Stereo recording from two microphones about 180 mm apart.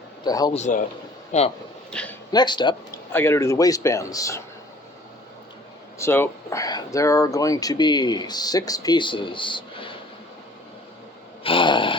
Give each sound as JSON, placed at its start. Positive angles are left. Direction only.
{"t": 0.3, "sound": "speech", "side_deg": 20}
{"t": 0.5, "sound": "a man's voice", "side_deg": 45}
{"t": 1.9, "sound": "speech", "side_deg": 5}
{"t": 2.3, "sound": "speech", "side_deg": 25}
{"t": 3.1, "sound": "a man's voice", "side_deg": 10}
{"t": 6.0, "sound": "speech", "side_deg": 10}
{"t": 11.4, "sound": "a sound", "side_deg": 25}